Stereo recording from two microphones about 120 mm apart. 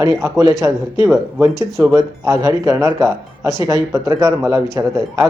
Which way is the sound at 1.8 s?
25° right (ahead or behind).